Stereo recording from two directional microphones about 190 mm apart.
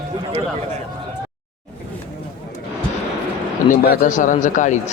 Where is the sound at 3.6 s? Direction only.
50° left (ahead or behind).